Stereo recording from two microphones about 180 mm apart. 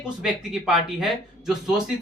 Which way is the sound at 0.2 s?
5° right (ahead or behind).